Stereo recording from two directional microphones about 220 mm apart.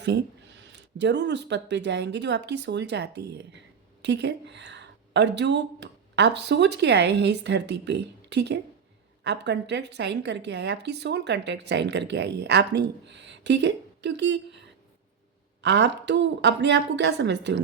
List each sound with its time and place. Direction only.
0.0 s a woman's voice: 50° right (ahead or behind)
15.6 s a woman's voice: 55° right (ahead or behind)